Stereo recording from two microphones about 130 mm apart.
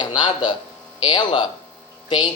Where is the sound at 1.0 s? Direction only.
35° left (ahead or behind).